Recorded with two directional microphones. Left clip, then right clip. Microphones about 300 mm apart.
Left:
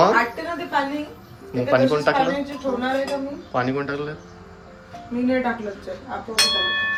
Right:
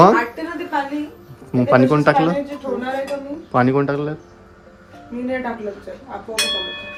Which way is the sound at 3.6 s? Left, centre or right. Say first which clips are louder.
Right 7 dB; centre.